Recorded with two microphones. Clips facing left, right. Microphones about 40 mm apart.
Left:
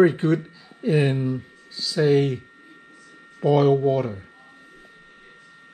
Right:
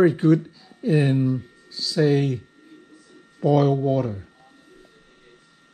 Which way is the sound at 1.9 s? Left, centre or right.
Left.